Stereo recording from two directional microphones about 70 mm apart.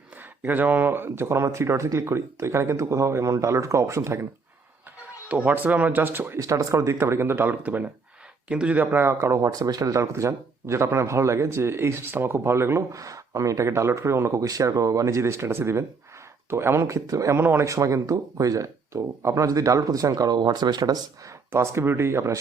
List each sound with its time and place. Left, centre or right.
0.4 s speech: right
5.3 s speech: right
6.4 s speech: right
7.6 s speech: right
9.1 s speech: right
16.8 s speech: right
17.4 s speech: right
17.7 s speech: right
21.5 s speech: right